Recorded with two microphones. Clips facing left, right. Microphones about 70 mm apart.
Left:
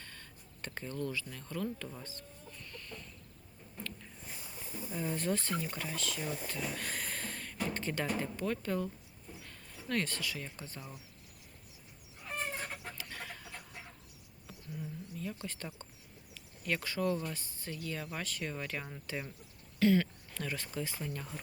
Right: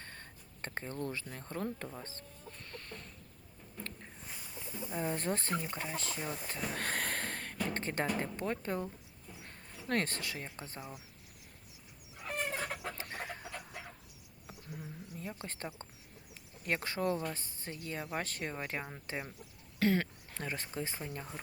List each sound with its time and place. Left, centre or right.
0.0 s speech: right
2.6 s chicken: right
3.8 s a sound: right
4.9 s speech: right
6.7 s a sound: right
8.2 s speech: right
10.8 s speech: centre
13.0 s chicken: right
14.4 s a sound: right
16.3 s speech: right
18.2 s speech: right
19.8 s speech: right